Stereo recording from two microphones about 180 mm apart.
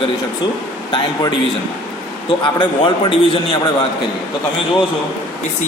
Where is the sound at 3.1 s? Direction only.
30° left (ahead or behind).